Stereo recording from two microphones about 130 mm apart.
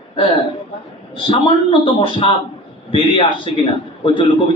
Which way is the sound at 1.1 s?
40° left (ahead or behind).